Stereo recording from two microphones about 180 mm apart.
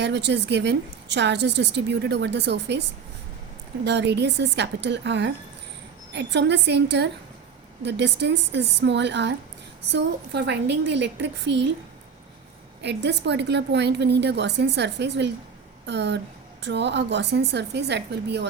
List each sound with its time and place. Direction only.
0.0 s a woman's voice: 70° right (ahead or behind)
3.8 s a woman's voice: 70° right (ahead or behind)
12.8 s a woman's voice: 70° right (ahead or behind)